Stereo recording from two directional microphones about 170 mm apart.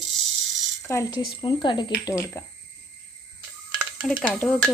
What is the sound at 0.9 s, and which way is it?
Speech, 20° left (ahead or behind).